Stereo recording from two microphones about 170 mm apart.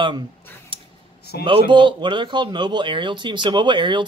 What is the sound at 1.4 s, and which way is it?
Speech, 30° right (ahead or behind).